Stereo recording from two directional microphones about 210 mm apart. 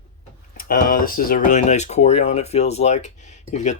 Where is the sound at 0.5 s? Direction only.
45° left (ahead or behind).